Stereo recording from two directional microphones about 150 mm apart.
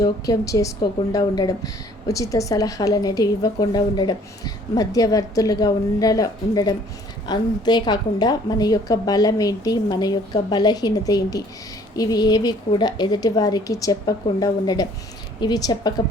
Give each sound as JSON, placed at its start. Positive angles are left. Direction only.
{"t": 0.0, "sound": "a woman's voice", "side_deg": 25}